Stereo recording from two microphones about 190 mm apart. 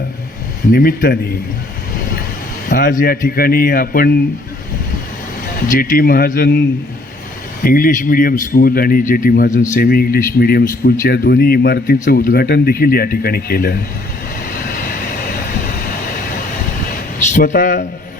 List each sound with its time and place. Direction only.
0.7 s speech: 50° left (ahead or behind)
2.6 s speech: 50° left (ahead or behind)
5.6 s speech: 45° left (ahead or behind)
14.7 s vehicle: 50° left (ahead or behind)
17.3 s speech: 45° left (ahead or behind)